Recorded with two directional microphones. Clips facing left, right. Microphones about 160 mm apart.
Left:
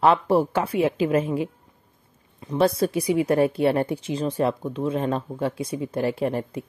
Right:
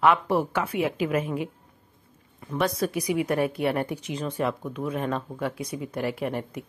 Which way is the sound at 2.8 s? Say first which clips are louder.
Left 4 dB; 30° left (ahead or behind).